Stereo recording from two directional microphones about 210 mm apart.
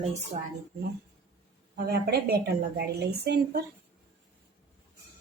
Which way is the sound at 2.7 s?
50° right (ahead or behind).